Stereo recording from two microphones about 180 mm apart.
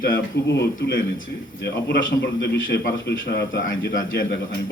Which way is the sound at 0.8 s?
70° left (ahead or behind).